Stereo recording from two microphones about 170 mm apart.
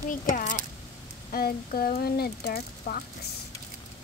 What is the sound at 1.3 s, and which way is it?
Speech, 60° left (ahead or behind).